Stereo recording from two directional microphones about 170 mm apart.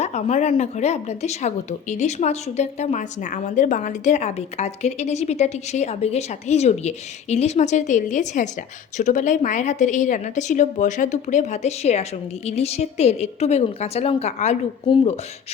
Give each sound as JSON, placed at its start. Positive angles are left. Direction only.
{"t": 0.0, "sound": "a woman's voice", "side_deg": 40}